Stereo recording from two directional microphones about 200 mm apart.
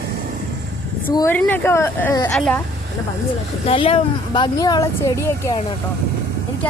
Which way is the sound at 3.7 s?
30° left (ahead or behind).